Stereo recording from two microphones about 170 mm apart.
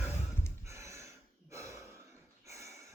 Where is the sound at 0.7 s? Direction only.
15° right (ahead or behind).